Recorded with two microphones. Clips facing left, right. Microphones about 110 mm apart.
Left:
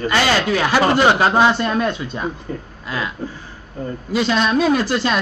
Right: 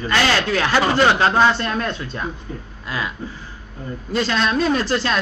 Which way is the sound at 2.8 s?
Centre (ahead or behind).